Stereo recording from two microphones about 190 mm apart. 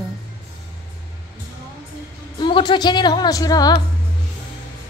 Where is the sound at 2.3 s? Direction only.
25° left (ahead or behind).